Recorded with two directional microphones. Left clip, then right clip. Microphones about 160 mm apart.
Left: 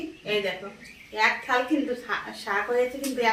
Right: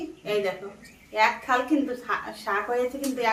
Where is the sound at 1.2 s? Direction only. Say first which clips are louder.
Right 1 dB; 30° right (ahead or behind).